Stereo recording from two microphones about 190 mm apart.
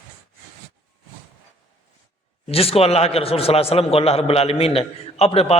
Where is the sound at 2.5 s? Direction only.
30° left (ahead or behind).